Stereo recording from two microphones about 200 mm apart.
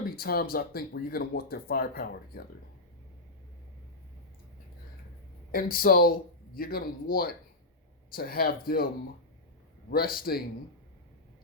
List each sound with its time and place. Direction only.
0.2 s speech: 50° left (ahead or behind)
5.5 s speech: 45° left (ahead or behind)
9.9 s speech: 50° left (ahead or behind)